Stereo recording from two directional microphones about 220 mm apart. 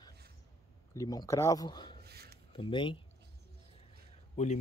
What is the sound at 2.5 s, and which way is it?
Speech, 20° left (ahead or behind).